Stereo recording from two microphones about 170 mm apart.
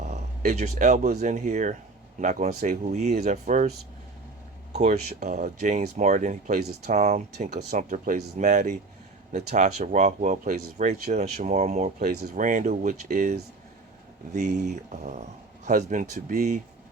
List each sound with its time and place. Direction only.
0.0 s speech: 45° right (ahead or behind)
4.7 s speech: 40° right (ahead or behind)
12.0 s speech: 65° right (ahead or behind); by 13.3 s 45° right (ahead or behind)
14.3 s speech: 45° right (ahead or behind)